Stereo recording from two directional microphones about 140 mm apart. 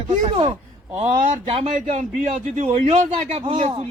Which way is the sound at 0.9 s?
45° right (ahead or behind).